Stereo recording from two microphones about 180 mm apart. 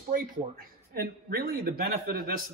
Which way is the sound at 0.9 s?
60° right (ahead or behind).